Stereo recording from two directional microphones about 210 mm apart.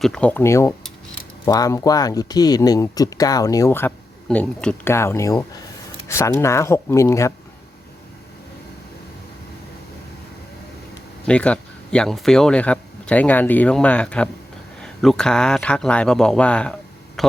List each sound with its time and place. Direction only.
0.0 s speech: 5° left (ahead or behind)
11.3 s speech: 5° left (ahead or behind)